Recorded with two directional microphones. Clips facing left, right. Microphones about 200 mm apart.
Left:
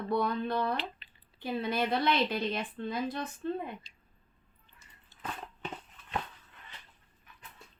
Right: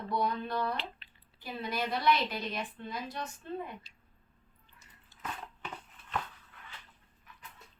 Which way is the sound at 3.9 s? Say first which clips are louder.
Even; 5° right (ahead or behind).